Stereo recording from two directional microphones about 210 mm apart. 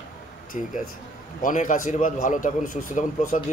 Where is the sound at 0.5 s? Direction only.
35° left (ahead or behind).